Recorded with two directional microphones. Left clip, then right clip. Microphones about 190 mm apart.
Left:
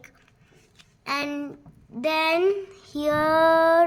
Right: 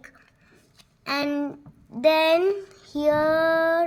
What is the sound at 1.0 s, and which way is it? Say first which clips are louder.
A woman's voice: right 2 dB; centre (ahead or behind).